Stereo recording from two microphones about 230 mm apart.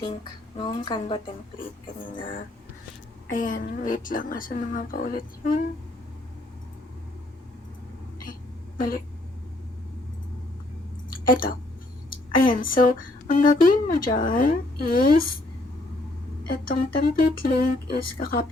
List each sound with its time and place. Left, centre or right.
0.0 s speech: centre
3.3 s speech: left
11.1 s a sound: left
12.6 s speech: left
16.5 s speech: left